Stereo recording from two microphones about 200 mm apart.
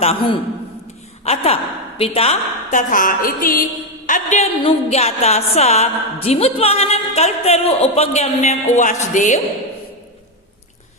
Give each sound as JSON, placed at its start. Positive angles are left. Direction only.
{"t": 0.0, "sound": "a woman's voice", "side_deg": 30}